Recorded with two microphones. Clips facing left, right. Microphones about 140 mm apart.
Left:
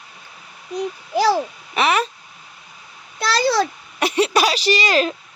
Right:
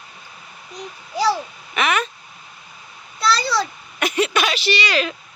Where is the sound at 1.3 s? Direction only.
35° left (ahead or behind).